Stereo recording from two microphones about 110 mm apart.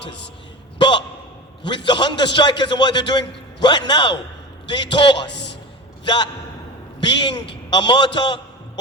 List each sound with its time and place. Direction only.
0.8 s a sound: 45° left (ahead or behind)
1.6 s a man's voice: 45° left (ahead or behind)
7.0 s a man's voice: 45° left (ahead or behind)